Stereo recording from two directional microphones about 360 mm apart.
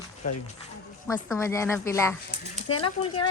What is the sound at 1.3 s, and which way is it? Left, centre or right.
A woman's voice, centre.